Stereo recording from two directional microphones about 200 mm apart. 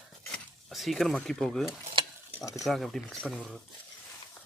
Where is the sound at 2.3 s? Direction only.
15° left (ahead or behind).